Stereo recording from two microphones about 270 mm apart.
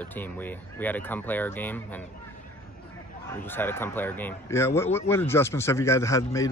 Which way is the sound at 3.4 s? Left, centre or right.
Centre.